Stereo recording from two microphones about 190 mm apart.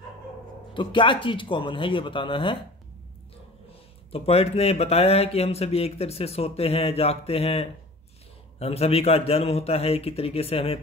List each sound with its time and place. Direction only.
0.7 s speech: 25° left (ahead or behind)
4.1 s speech: 30° left (ahead or behind)